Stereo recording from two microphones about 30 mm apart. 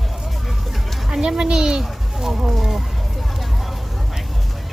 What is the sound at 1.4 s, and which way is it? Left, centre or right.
Speech, right.